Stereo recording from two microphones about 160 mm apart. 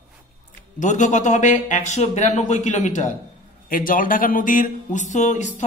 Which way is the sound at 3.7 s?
60° left (ahead or behind).